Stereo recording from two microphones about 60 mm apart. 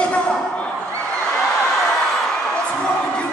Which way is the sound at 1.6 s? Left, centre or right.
Centre.